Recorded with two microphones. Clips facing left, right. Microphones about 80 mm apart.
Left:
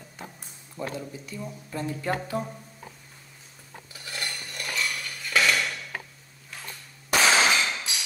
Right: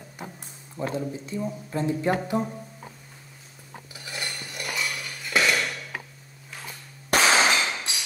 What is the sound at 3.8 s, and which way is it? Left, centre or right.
Cutlery, centre.